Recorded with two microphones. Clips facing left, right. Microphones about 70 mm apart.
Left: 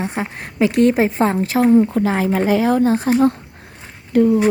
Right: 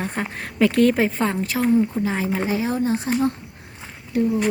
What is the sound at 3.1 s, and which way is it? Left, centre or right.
Speech, left.